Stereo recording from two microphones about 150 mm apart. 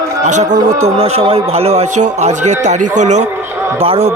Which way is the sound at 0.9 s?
40° right (ahead or behind).